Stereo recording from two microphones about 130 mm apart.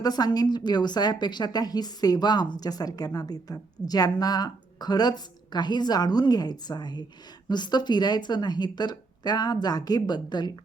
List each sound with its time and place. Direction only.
0.0 s a woman's voice: 30° left (ahead or behind)